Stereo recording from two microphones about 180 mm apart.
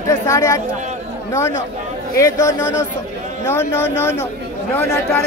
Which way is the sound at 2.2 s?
20° left (ahead or behind).